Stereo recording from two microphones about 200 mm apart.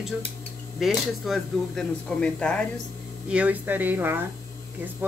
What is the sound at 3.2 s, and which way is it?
Speech, 5° right (ahead or behind).